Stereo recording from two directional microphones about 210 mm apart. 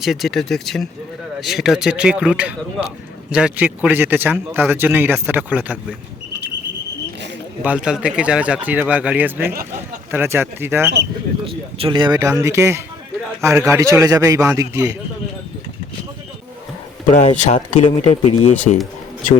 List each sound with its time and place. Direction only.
0.0 s a man's voice: centre (ahead or behind)
7.6 s a man's voice: 5° right (ahead or behind)
11.4 s a man's voice: 25° right (ahead or behind)
17.1 s speech: 35° left (ahead or behind)